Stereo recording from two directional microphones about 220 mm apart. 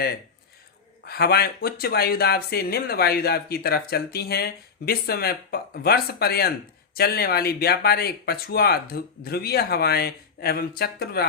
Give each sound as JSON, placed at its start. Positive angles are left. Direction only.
{"t": 1.0, "sound": "speech", "side_deg": 45}